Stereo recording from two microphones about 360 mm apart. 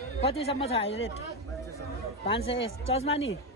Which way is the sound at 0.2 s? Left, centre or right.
Centre.